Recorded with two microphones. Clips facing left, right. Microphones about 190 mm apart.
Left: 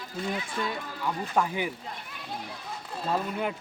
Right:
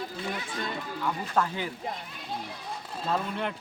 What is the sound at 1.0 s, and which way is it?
Speech, 10° left (ahead or behind).